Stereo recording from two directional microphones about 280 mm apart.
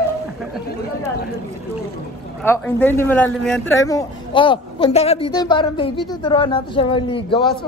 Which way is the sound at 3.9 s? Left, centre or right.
Centre.